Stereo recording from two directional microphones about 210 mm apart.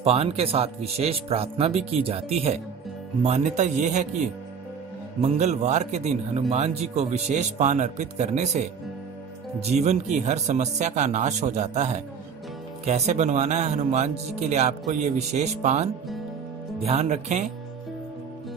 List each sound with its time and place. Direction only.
0.0 s speech: 30° right (ahead or behind)